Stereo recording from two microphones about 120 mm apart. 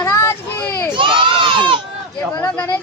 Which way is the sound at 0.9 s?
45° right (ahead or behind).